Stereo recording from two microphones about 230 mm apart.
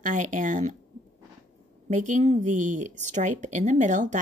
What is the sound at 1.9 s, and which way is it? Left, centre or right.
A woman's voice, right.